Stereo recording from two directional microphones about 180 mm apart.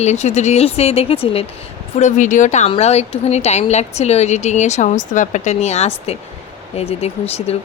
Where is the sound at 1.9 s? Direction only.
45° left (ahead or behind).